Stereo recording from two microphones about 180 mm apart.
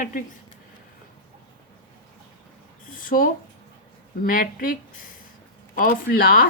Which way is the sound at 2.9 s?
50° left (ahead or behind).